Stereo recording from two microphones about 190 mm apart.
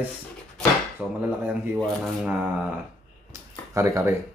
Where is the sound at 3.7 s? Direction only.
15° right (ahead or behind).